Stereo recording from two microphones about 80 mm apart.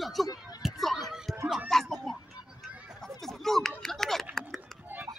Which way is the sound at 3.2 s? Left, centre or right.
Centre.